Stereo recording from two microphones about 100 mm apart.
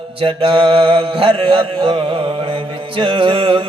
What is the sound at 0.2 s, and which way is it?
Mantra, 60° right (ahead or behind).